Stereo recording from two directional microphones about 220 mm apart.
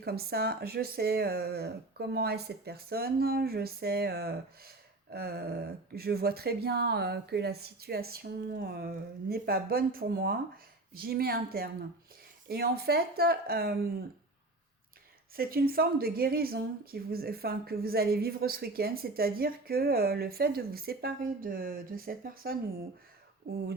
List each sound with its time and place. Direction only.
0.0 s a woman's voice: 45° right (ahead or behind)
15.4 s a woman's voice: 45° right (ahead or behind)